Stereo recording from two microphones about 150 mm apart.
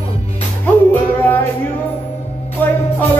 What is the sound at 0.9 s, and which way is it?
Music, 15° left (ahead or behind).